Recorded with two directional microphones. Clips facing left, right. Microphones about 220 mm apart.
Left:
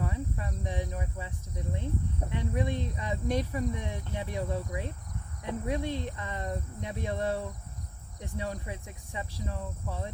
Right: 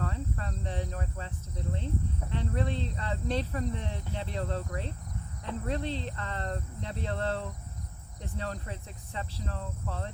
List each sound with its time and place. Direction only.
0.0 s cricket: 15° left (ahead or behind)
2.3 s speech: 15° left (ahead or behind)